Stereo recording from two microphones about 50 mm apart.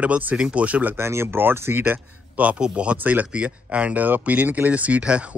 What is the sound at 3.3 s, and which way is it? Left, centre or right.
Speech, right.